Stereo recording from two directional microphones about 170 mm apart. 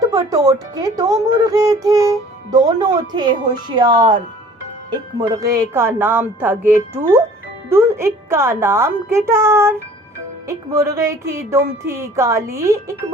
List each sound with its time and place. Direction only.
0.0 s speech: 20° right (ahead or behind)
5.3 s speech: 20° right (ahead or behind)